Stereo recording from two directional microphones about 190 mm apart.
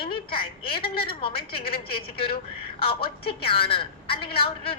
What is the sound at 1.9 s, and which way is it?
Speech, 55° left (ahead or behind).